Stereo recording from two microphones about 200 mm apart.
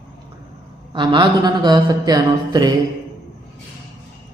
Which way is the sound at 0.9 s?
25° right (ahead or behind).